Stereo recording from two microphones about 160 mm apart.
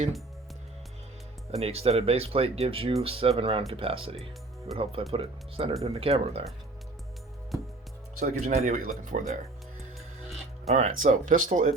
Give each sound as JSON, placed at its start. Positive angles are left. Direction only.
{"t": 1.5, "sound": "speech", "side_deg": -40}
{"t": 8.2, "sound": "speech", "side_deg": -55}
{"t": 10.8, "sound": "speech", "side_deg": -45}